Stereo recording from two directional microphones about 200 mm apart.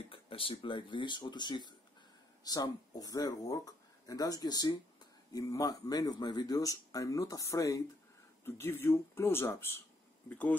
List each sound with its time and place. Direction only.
0.0 s speech: 25° left (ahead or behind)